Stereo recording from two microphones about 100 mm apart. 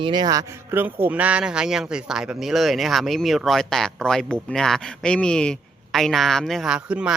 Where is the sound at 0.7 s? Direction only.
20° right (ahead or behind).